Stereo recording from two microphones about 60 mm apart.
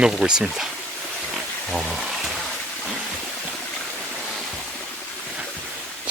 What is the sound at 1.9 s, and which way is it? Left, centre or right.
Speech, centre.